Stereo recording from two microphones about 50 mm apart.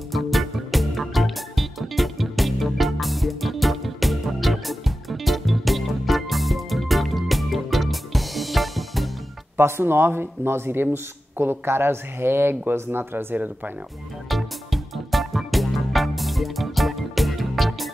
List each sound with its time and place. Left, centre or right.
0.1 s music: centre
9.6 s speech: right
14.3 s music: centre